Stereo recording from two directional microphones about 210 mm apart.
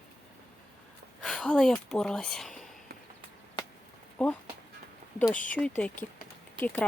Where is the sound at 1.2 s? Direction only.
5° left (ahead or behind).